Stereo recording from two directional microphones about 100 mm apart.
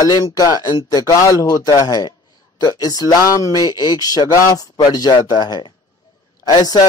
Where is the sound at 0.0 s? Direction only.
40° left (ahead or behind).